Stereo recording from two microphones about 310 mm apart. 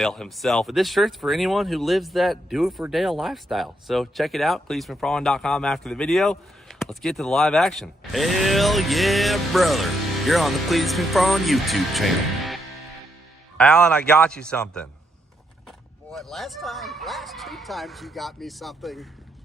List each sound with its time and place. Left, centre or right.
0.0 s speech: centre
13.6 s speech: centre
16.1 s speech: centre